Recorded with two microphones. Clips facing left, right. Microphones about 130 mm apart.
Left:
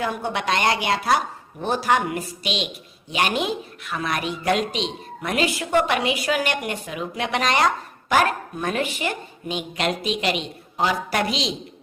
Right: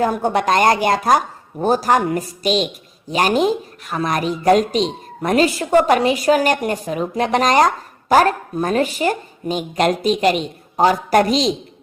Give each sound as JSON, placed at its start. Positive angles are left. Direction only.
{"t": 0.0, "sound": "a woman's voice", "side_deg": -45}